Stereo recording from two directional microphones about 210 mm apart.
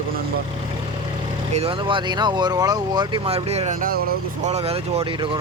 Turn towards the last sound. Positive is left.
turn(degrees=-25)  # may be behind; listen again after turning